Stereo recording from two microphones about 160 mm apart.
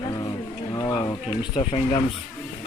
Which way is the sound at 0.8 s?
20° left (ahead or behind).